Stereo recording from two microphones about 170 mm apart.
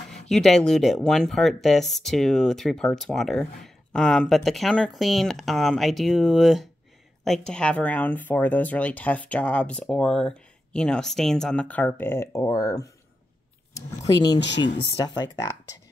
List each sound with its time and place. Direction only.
0.1 s speech: centre (ahead or behind); by 15.8 s 20° left (ahead or behind)